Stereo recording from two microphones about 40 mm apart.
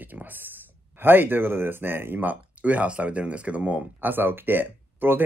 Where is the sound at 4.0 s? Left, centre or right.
Right.